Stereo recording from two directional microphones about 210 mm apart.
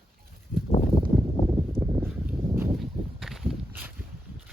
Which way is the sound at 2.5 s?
Centre (ahead or behind).